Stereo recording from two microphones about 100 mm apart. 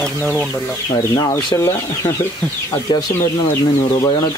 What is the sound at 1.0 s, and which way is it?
Speech, 35° left (ahead or behind).